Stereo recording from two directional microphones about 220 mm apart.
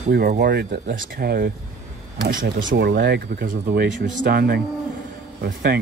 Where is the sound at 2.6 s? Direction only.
50° right (ahead or behind).